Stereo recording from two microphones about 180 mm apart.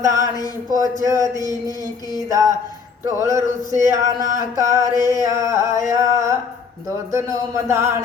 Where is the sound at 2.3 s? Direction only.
15° right (ahead or behind).